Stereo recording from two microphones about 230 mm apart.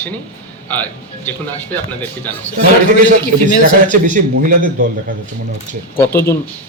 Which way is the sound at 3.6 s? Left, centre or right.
Right.